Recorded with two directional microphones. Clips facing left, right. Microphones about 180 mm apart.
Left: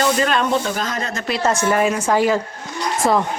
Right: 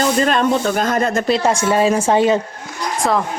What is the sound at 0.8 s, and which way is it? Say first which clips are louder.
Speech: right 8 dB; 55° right (ahead or behind).